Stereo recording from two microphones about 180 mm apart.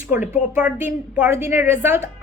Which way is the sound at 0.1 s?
10° right (ahead or behind).